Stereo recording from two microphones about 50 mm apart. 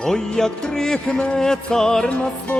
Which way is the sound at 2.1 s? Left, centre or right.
Left.